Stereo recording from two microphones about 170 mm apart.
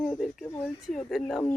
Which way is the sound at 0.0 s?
Centre (ahead or behind).